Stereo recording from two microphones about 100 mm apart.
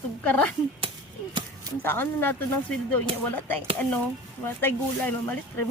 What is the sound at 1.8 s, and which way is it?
Speech, 20° left (ahead or behind).